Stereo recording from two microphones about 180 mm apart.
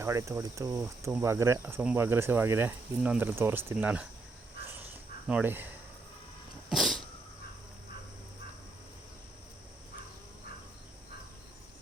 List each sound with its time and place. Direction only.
0.0 s speech: 15° right (ahead or behind)
5.3 s speech: 10° right (ahead or behind)
6.7 s cat: centre (ahead or behind)